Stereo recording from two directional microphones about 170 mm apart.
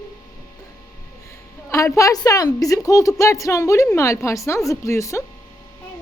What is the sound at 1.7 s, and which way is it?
A woman's voice, 20° left (ahead or behind).